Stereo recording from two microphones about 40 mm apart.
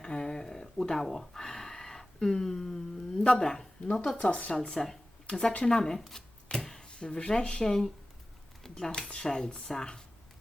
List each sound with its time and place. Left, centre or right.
0.0 s a sound: left
3.4 s speech: centre
4.2 s speech: left
4.5 s speech: centre
5.2 s speech: left
6.6 s a sound: centre
6.8 s speech: left
7.6 s speech: centre